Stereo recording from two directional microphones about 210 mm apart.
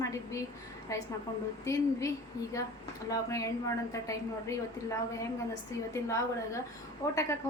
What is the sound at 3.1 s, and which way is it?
A woman's voice, 15° left (ahead or behind).